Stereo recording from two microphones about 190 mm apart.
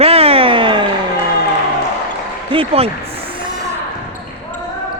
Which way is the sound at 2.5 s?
30° right (ahead or behind).